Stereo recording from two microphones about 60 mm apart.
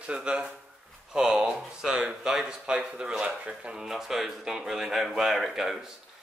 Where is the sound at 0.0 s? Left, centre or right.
Centre.